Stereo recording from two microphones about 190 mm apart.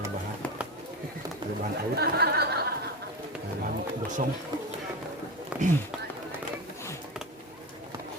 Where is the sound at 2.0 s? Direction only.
55° right (ahead or behind).